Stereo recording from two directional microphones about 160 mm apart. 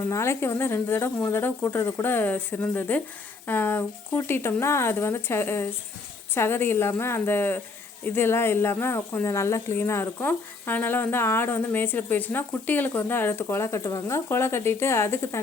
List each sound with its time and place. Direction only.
0.1 s speech: 15° left (ahead or behind)